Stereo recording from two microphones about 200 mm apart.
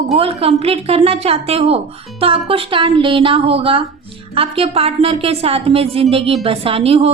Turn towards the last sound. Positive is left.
turn(degrees=-30)  # may be behind; listen again after turning